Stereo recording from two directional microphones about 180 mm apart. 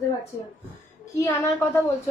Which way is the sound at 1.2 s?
10° left (ahead or behind).